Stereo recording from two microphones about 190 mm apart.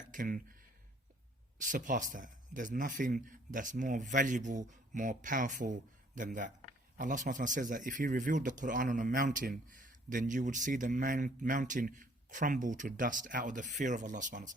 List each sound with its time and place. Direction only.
0.1 s speech: 45° right (ahead or behind)
1.6 s speech: 45° right (ahead or behind)